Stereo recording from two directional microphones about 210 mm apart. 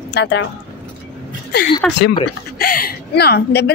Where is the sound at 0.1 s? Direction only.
55° left (ahead or behind).